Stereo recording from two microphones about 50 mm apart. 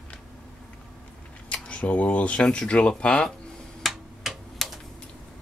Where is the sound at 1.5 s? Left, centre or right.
Left.